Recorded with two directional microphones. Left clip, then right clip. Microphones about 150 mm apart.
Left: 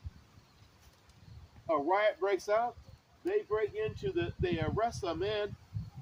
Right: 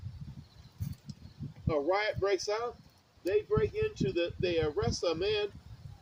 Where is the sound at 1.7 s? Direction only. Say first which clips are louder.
Left 1 dB; 25° left (ahead or behind).